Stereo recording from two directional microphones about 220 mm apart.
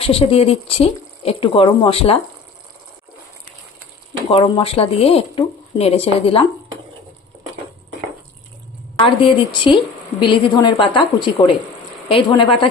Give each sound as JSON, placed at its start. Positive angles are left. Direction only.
{"t": 0.0, "sound": "a woman's voice", "side_deg": 25}
{"t": 4.3, "sound": "a woman's voice", "side_deg": 25}
{"t": 9.0, "sound": "a woman's voice", "side_deg": 20}